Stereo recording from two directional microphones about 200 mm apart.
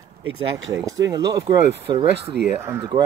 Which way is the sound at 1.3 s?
25° right (ahead or behind).